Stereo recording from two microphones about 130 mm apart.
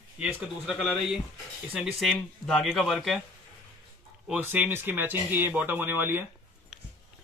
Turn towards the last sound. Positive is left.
turn(degrees=-15)  # may be behind; listen again after turning